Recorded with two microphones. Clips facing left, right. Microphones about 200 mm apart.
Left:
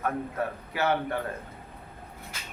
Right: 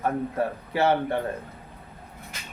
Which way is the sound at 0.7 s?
30° right (ahead or behind).